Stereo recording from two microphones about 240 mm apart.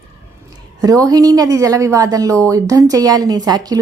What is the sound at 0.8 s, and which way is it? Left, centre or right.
A woman's voice, centre.